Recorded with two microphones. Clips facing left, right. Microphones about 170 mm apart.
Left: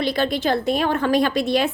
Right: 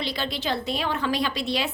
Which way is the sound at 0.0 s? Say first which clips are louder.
Left 8 dB; 50° left (ahead or behind).